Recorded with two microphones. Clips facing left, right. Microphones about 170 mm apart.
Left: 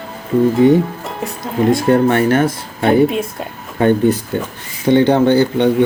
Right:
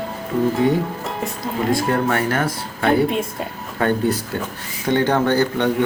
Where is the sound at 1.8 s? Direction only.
30° left (ahead or behind).